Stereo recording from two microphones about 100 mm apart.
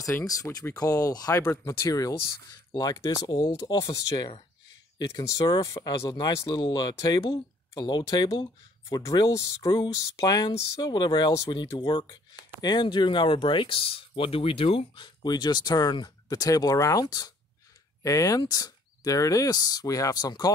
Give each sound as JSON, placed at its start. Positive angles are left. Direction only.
{"t": 0.0, "sound": "speech", "side_deg": 35}
{"t": 1.4, "sound": "speech", "side_deg": 25}
{"t": 1.9, "sound": "speech", "side_deg": 35}
{"t": 5.8, "sound": "speech", "side_deg": 45}
{"t": 15.0, "sound": "speech", "side_deg": 45}